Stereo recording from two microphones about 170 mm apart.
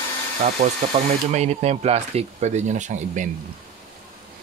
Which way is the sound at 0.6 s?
40° right (ahead or behind).